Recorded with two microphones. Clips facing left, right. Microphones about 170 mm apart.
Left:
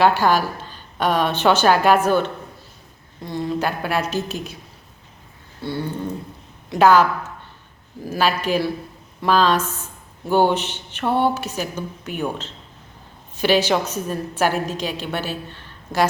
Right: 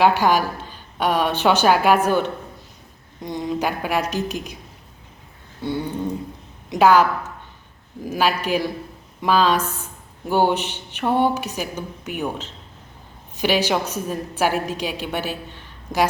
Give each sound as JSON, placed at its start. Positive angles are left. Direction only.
{"t": 0.0, "sound": "a woman's voice", "side_deg": -15}
{"t": 5.6, "sound": "a woman's voice", "side_deg": -15}
{"t": 8.1, "sound": "a woman's voice", "side_deg": -10}